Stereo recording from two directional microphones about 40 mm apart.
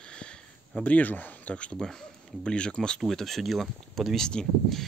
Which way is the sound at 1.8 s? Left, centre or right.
Centre.